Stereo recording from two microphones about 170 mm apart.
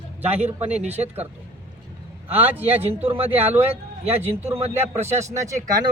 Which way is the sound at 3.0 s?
35° right (ahead or behind).